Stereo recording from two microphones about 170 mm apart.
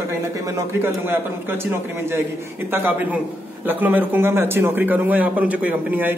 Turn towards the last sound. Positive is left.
turn(degrees=-10)  # may be behind; listen again after turning